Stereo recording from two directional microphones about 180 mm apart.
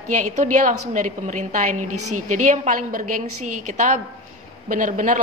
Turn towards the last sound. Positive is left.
turn(degrees=-45)  # may be behind; listen again after turning